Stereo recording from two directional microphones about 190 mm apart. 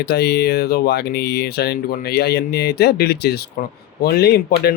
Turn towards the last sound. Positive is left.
turn(degrees=55)  # may be behind; listen again after turning